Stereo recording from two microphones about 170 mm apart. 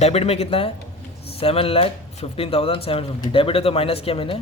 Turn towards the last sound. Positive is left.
turn(degrees=35)  # may be behind; listen again after turning